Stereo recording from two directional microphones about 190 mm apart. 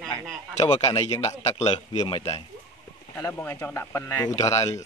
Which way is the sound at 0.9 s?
30° left (ahead or behind).